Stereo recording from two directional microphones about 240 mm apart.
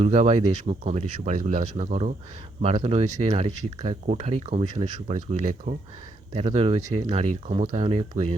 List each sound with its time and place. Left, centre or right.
0.0 s speech: right